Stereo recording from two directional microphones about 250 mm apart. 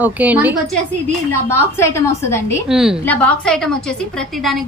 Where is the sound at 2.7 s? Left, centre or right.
Centre.